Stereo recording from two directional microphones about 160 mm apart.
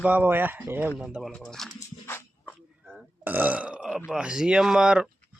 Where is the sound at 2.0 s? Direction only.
15° left (ahead or behind).